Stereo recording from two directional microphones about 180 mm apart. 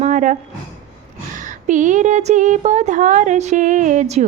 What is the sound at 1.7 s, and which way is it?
Speech, 45° right (ahead or behind).